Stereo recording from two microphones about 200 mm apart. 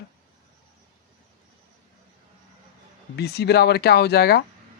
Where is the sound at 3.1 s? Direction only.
55° left (ahead or behind).